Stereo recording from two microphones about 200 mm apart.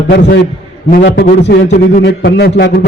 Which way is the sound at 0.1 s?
60° left (ahead or behind).